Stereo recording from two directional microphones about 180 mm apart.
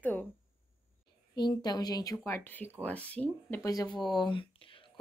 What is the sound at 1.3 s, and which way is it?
Speech, 25° left (ahead or behind).